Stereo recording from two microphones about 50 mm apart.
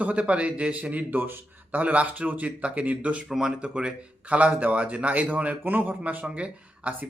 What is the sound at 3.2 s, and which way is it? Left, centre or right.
A man's voice, centre.